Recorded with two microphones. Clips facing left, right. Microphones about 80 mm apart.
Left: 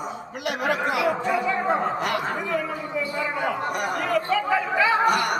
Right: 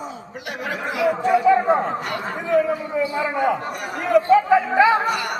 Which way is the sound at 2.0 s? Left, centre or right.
Left.